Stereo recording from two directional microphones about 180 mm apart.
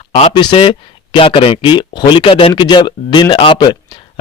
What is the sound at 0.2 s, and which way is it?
Speech, 30° left (ahead or behind).